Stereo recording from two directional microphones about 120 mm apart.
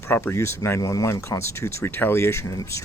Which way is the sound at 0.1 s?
20° left (ahead or behind).